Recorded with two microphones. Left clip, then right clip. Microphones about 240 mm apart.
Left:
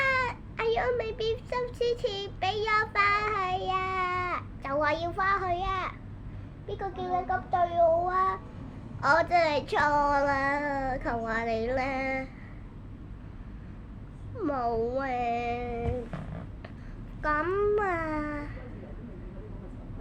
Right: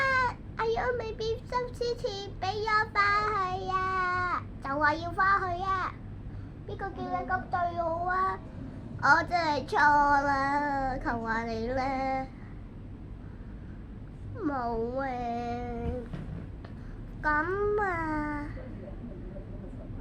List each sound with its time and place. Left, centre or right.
0.0 s a child's voice: left
14.3 s a child's voice: left
17.2 s a sound: left